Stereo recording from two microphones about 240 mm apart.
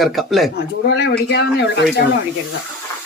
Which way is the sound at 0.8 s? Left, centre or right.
Left.